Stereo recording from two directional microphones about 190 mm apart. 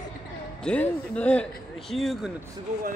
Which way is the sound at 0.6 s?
5° left (ahead or behind).